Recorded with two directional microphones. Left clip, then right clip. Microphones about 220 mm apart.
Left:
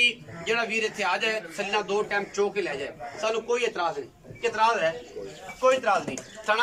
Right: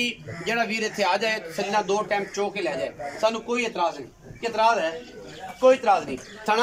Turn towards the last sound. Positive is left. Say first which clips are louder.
# right 2 dB
turn(degrees=-25)  # may be behind; listen again after turning